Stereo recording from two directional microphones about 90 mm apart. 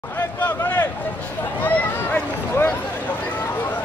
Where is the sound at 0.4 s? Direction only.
20° left (ahead or behind).